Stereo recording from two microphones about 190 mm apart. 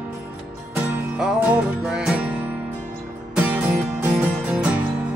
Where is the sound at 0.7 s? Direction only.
5° right (ahead or behind).